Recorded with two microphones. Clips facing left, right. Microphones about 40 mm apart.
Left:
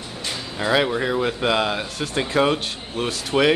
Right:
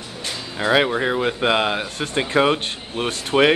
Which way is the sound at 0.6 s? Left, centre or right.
Centre.